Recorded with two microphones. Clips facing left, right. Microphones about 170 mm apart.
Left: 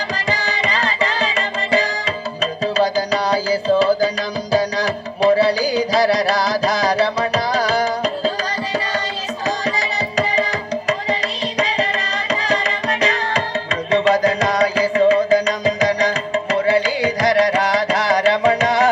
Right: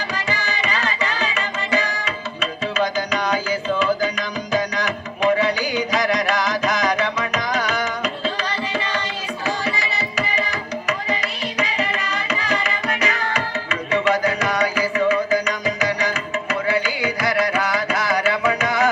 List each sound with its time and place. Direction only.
0.3 s music: 35° left (ahead or behind)
9.6 s tabla: 40° left (ahead or behind)
11.1 s music: 35° left (ahead or behind)